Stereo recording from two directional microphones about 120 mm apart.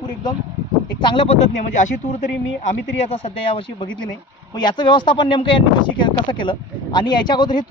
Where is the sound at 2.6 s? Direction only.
65° left (ahead or behind).